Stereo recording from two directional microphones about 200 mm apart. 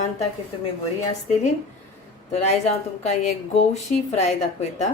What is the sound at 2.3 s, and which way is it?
Speech, 35° left (ahead or behind).